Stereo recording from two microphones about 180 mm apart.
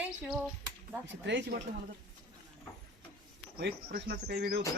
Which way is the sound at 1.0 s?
90° right.